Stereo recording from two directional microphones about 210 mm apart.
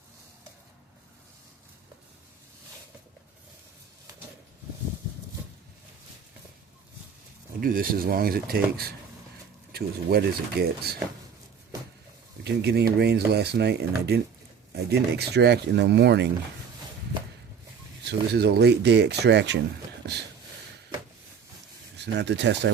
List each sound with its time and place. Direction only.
7.6 s speech: 45° right (ahead or behind)
12.4 s speech: 50° right (ahead or behind)
18.1 s speech: 50° right (ahead or behind)
20.0 s a sound: 50° right (ahead or behind)
21.9 s speech: 55° right (ahead or behind)